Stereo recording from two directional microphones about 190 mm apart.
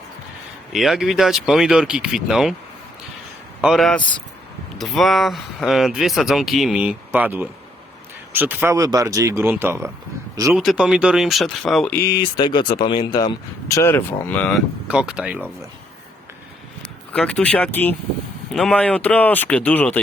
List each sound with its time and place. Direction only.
0.7 s speech: centre (ahead or behind)
3.6 s speech: centre (ahead or behind)
10.5 s speech: centre (ahead or behind)
12.0 s speech: 25° left (ahead or behind); by 14.6 s 5° left (ahead or behind)
14.8 s speech: 5° right (ahead or behind)
17.1 s speech: 5° left (ahead or behind)